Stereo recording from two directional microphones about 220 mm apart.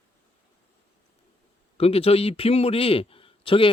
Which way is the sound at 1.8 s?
25° left (ahead or behind).